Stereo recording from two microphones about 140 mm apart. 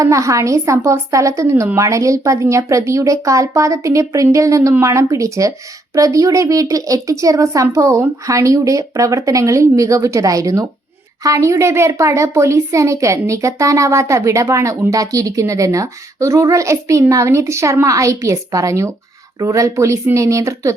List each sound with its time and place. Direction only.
0.0 s a woman's voice: 25° right (ahead or behind)